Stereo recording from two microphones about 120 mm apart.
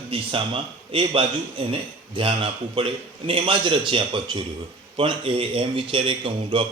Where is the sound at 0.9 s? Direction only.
50° right (ahead or behind).